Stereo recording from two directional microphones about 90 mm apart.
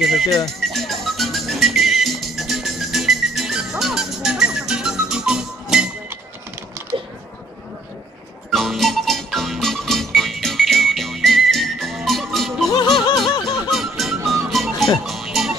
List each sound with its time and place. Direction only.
0.0 s speech: centre (ahead or behind)
0.5 s music: 5° left (ahead or behind)
8.5 s music: centre (ahead or behind)
12.7 s music: 55° left (ahead or behind)
13.7 s music: centre (ahead or behind)